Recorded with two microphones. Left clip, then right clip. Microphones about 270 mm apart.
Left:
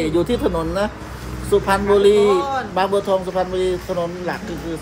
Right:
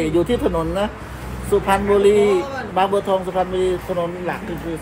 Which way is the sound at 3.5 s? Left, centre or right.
Centre.